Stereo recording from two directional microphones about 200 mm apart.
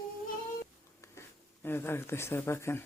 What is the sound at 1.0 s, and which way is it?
Speech, 10° left (ahead or behind).